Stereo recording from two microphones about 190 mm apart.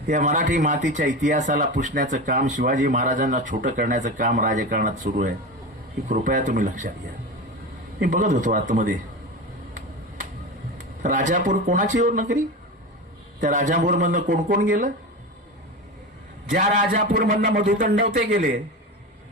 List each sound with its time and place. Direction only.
0.1 s a man's voice: 40° right (ahead or behind)
7.9 s a man's voice: 40° right (ahead or behind)
10.8 s speech: 40° right (ahead or behind)
13.4 s a man's voice: 40° right (ahead or behind)
16.5 s a man's voice: 45° right (ahead or behind)